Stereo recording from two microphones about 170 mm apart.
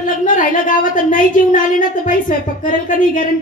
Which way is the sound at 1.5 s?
50° left (ahead or behind).